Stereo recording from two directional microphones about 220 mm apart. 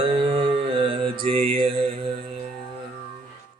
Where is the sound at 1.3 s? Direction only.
25° right (ahead or behind).